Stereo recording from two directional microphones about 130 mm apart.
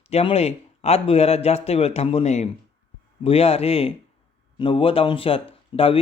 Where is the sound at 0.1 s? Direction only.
50° left (ahead or behind).